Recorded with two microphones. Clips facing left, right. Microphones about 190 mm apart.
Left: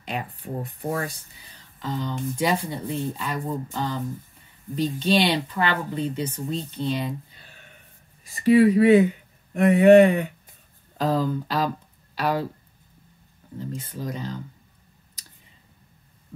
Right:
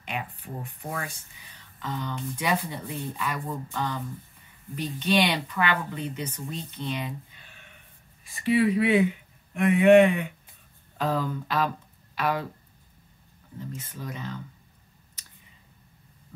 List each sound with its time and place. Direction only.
0.0 s speech: 35° left (ahead or behind)
13.6 s speech: 30° left (ahead or behind)